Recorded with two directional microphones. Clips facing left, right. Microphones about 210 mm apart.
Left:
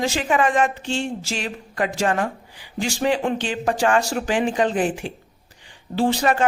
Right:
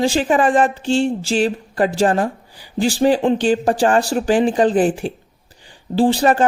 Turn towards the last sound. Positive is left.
turn(degrees=-35)  # may be behind; listen again after turning